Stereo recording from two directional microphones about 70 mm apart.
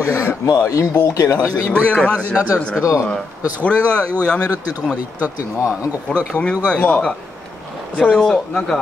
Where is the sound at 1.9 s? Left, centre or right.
Centre.